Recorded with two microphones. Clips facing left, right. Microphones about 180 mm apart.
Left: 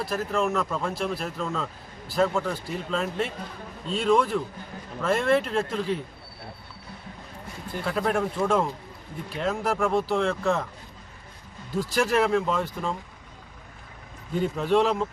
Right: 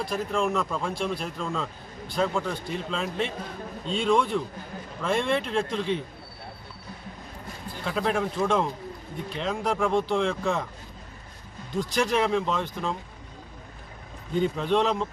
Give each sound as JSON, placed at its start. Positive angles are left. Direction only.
{"t": 0.0, "sound": "speech", "side_deg": 5}
{"t": 7.9, "sound": "speech", "side_deg": 0}
{"t": 11.7, "sound": "speech", "side_deg": 5}
{"t": 14.3, "sound": "speech", "side_deg": 5}